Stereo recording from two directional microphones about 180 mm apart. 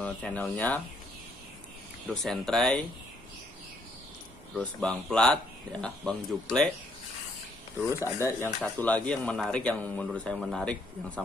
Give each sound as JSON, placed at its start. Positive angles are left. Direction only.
{"t": 0.0, "sound": "speech", "side_deg": 10}
{"t": 2.0, "sound": "speech", "side_deg": 0}
{"t": 4.6, "sound": "speech", "side_deg": 5}
{"t": 7.9, "sound": "speech", "side_deg": 15}